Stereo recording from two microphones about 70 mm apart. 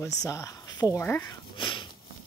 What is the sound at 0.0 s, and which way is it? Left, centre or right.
Speech, left.